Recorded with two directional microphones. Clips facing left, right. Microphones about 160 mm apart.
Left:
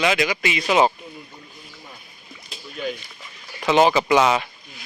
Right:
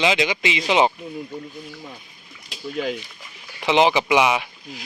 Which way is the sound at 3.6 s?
15° right (ahead or behind).